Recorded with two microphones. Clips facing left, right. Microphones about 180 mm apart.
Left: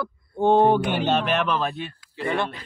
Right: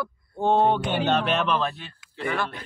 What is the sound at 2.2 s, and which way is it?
Speech, 25° left (ahead or behind).